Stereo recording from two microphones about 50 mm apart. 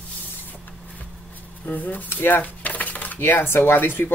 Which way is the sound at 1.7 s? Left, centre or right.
Left.